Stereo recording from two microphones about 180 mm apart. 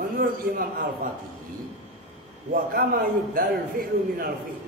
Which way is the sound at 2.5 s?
55° right (ahead or behind).